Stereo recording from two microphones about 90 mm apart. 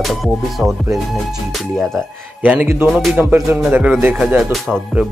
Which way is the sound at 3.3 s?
20° right (ahead or behind).